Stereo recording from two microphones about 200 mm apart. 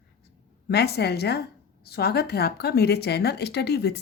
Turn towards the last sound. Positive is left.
turn(degrees=55)  # may be behind; listen again after turning